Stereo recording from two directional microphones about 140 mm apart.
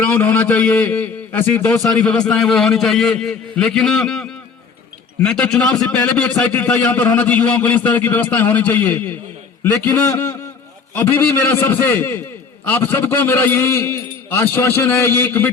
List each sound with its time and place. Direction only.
0.0 s a man's voice: 15° left (ahead or behind)